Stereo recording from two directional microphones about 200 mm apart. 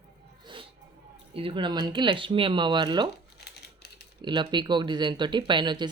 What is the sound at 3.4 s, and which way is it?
Crumpling, 55° left (ahead or behind).